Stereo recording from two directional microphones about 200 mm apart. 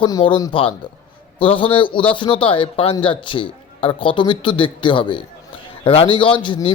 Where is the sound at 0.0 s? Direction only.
25° left (ahead or behind).